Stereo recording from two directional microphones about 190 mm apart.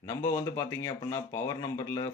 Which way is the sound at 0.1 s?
15° left (ahead or behind).